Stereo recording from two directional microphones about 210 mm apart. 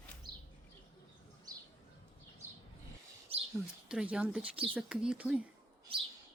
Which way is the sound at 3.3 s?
30° right (ahead or behind).